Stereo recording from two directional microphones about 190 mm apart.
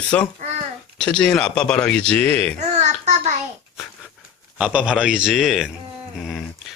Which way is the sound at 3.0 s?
35° right (ahead or behind).